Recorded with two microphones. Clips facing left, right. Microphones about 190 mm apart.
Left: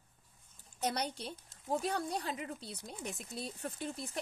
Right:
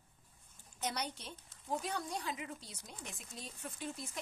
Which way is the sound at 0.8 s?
35° left (ahead or behind).